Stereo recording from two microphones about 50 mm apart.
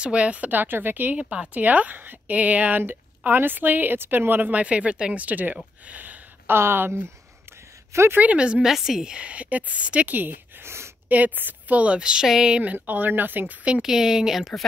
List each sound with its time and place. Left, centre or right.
0.0 s speech: right
1.1 s speech: right
2.8 s speech: right
5.2 s speech: right
6.4 s speech: right
8.2 s a woman's voice: right
8.6 s a woman's voice: centre; by 10.3 s right
10.6 s speech: right
11.1 s a woman's voice: right
12.7 s speech: right
13.8 s speech: centre